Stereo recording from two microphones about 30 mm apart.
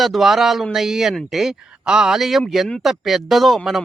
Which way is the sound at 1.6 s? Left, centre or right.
Right.